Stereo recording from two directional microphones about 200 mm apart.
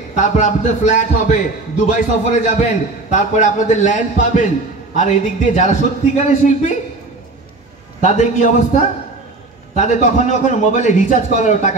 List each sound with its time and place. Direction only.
0.1 s a man's voice: 35° left (ahead or behind)
8.0 s a man's voice: 35° left (ahead or behind)